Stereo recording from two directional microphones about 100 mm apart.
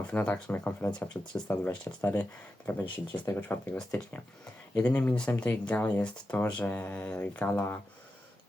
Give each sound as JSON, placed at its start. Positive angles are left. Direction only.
{"t": 0.1, "sound": "speech", "side_deg": 15}